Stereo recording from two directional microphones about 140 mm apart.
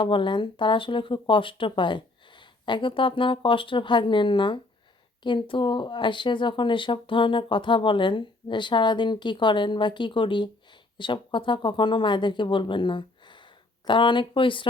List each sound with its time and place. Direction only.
0.0 s speech: 35° left (ahead or behind)